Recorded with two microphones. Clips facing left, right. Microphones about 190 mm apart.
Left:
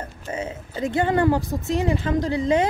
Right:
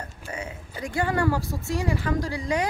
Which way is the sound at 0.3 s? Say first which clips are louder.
Left 7 dB; 25° left (ahead or behind).